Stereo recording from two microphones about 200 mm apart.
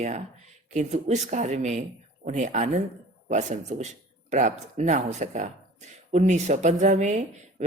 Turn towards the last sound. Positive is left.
turn(degrees=-35)  # may be behind; listen again after turning